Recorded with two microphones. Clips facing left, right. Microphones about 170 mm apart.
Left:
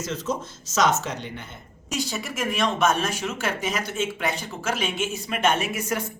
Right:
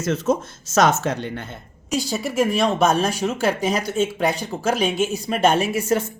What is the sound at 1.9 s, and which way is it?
Speech, 35° right (ahead or behind).